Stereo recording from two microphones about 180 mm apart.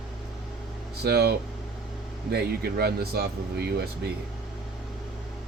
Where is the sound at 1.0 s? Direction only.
65° right (ahead or behind).